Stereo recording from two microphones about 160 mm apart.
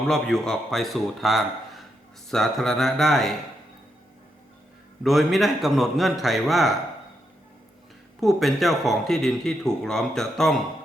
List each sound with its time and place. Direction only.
0.1 s speech: 5° left (ahead or behind)
5.0 s speech: centre (ahead or behind)
8.2 s speech: centre (ahead or behind)